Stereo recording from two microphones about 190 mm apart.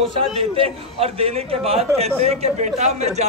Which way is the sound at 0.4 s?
30° right (ahead or behind).